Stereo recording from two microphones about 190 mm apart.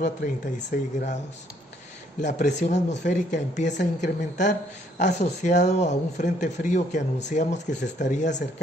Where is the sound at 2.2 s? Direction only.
40° left (ahead or behind).